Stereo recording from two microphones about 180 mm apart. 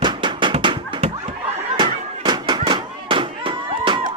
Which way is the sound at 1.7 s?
25° right (ahead or behind).